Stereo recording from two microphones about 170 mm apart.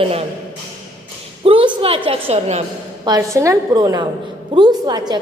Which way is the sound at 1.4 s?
35° right (ahead or behind).